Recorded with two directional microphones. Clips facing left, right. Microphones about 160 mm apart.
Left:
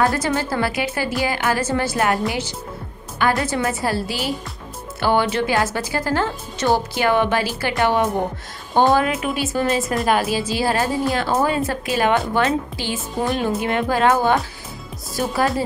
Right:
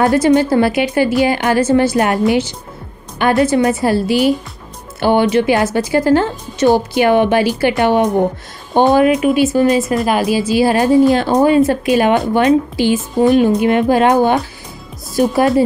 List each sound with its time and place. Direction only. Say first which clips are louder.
0.0 s a woman's voice: right 9 dB; 20° right (ahead or behind)